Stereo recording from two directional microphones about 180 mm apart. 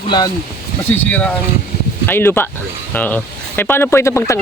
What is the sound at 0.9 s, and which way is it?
Speech, 10° left (ahead or behind).